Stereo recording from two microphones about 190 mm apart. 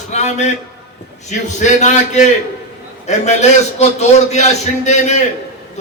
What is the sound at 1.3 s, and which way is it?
Speech, 40° left (ahead or behind).